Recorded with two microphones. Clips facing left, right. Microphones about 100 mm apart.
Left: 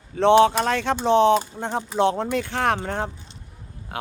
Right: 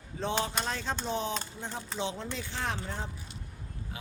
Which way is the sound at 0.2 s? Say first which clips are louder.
Left 17 dB; 75° left (ahead or behind).